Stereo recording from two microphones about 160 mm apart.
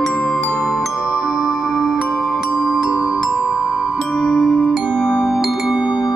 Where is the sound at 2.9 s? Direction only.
20° left (ahead or behind).